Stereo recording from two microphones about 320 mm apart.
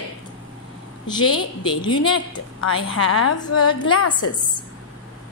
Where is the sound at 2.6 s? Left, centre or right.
Left.